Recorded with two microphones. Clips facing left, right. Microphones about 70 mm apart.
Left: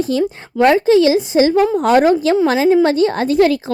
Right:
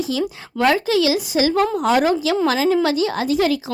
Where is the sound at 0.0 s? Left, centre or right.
Left.